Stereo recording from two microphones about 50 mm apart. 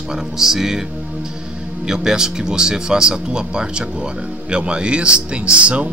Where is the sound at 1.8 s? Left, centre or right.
Centre.